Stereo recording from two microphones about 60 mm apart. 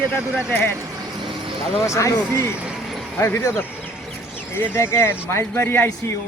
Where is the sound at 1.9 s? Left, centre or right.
Left.